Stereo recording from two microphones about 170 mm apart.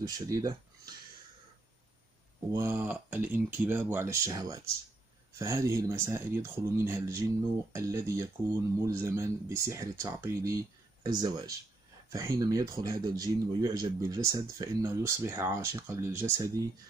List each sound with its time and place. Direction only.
0.0 s speech: 20° right (ahead or behind)
2.5 s speech: 15° right (ahead or behind)